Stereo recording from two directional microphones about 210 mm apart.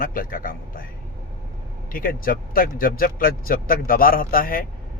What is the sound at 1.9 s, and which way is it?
Speech, 45° left (ahead or behind).